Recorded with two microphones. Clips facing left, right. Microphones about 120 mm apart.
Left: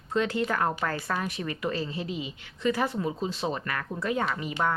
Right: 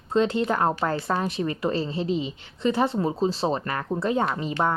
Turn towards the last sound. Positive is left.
turn(degrees=-30)  # may be behind; listen again after turning